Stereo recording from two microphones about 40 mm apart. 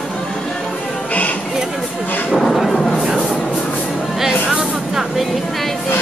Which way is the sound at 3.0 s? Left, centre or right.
Centre.